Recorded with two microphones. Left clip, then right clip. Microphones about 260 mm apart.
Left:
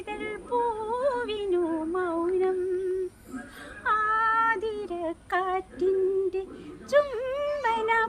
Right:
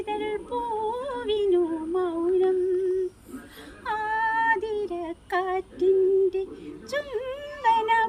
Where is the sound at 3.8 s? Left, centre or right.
Centre.